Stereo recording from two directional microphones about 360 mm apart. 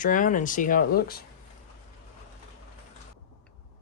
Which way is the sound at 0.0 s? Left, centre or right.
Left.